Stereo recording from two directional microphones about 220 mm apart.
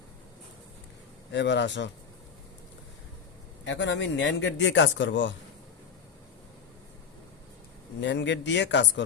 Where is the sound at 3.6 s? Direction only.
55° left (ahead or behind).